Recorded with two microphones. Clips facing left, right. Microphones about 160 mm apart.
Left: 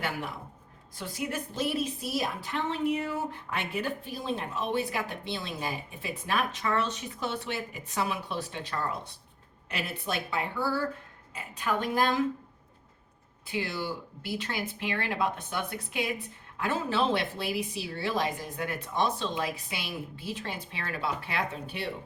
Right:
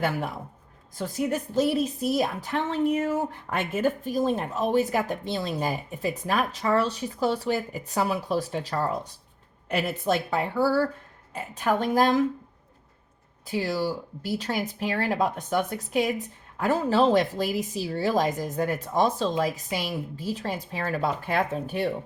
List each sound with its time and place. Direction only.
0.9 s a woman's voice: 40° right (ahead or behind)
13.5 s a woman's voice: 40° right (ahead or behind)